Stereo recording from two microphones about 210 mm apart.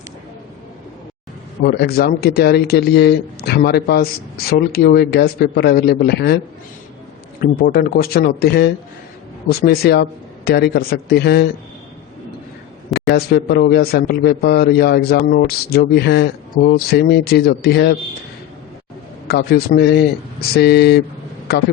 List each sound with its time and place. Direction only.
1.6 s a man's voice: 50° left (ahead or behind)
7.6 s a man's voice: 45° left (ahead or behind)
12.9 s a man's voice: 50° left (ahead or behind)
19.3 s a man's voice: 50° left (ahead or behind)